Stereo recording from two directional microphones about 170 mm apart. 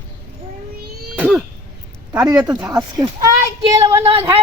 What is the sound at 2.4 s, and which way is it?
Speech, 5° right (ahead or behind).